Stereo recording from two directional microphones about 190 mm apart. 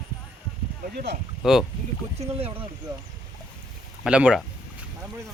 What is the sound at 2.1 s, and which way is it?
Speech, 35° right (ahead or behind).